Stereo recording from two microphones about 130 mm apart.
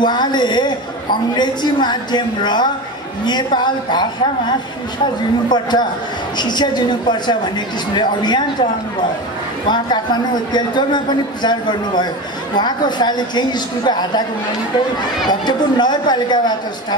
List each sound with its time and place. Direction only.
0.0 s a man's voice: 35° left (ahead or behind)
9.7 s a man's voice: 35° left (ahead or behind)
15.2 s a man's voice: 35° left (ahead or behind)